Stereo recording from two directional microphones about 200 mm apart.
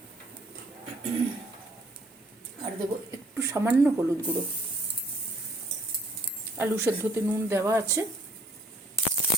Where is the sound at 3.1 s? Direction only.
15° right (ahead or behind).